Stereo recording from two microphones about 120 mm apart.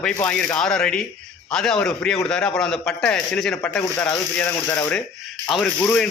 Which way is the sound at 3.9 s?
20° left (ahead or behind).